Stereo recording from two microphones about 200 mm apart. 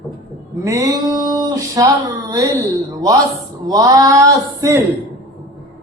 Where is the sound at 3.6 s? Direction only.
15° right (ahead or behind).